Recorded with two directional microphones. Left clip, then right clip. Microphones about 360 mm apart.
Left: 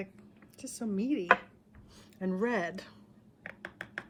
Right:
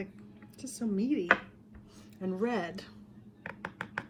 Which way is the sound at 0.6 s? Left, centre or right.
Centre.